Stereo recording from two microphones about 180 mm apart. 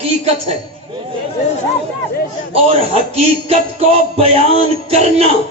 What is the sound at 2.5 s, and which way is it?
Speech, 35° right (ahead or behind).